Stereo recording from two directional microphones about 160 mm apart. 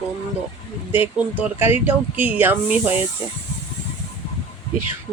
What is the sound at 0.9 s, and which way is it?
Speech, 10° right (ahead or behind).